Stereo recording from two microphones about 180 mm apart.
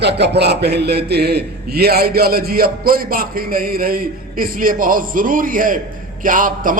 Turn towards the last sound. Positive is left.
turn(degrees=-50)  # may be behind; listen again after turning